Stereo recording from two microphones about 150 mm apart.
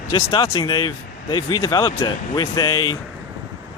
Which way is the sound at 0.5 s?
30° left (ahead or behind).